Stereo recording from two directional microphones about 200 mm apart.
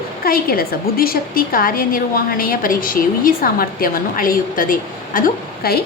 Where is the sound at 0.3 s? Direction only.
50° left (ahead or behind).